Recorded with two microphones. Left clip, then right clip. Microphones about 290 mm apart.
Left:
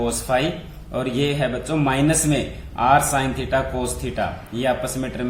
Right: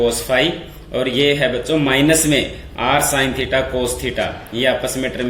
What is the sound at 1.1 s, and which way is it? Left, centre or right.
A man's voice, left.